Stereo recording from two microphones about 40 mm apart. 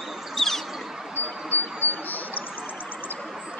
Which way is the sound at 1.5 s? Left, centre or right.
Left.